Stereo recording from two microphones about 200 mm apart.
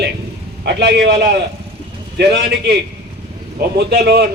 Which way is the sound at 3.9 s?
55° right (ahead or behind).